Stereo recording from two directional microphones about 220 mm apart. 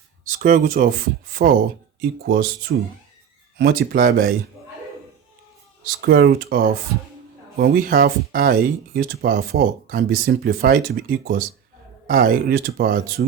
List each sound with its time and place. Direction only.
0.3 s speech: 40° right (ahead or behind)
5.8 s speech: 45° right (ahead or behind)